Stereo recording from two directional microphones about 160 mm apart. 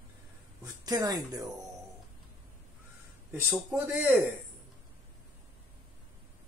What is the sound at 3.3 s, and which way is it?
Speech, 10° right (ahead or behind).